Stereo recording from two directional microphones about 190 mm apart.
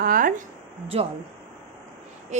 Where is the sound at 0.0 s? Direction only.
45° right (ahead or behind).